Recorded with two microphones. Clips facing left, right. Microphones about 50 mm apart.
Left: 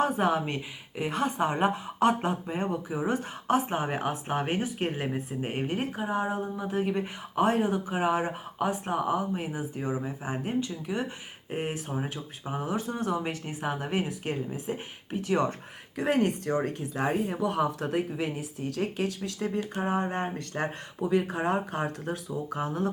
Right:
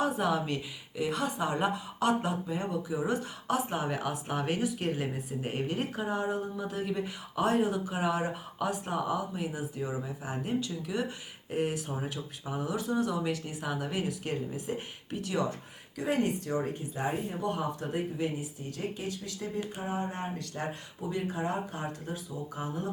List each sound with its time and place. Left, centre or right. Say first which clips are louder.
0.0 s a woman's voice: left 3 dB; left
10.4 s a woman's voice: left 1 dB; left
16.0 s speech: left 4 dB; left
16.9 s speech: left 7 dB; left
21.0 s speech: left 6 dB; left
21.7 s speech: left 6 dB; left